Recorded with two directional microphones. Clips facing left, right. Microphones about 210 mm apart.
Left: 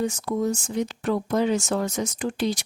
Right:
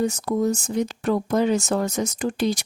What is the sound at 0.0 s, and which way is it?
Speech, 40° right (ahead or behind).